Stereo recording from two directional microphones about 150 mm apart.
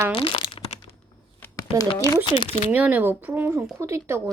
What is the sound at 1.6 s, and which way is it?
Speech, 25° left (ahead or behind).